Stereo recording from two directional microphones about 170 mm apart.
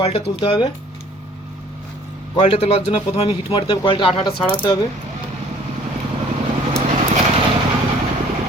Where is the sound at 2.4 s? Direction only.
35° left (ahead or behind).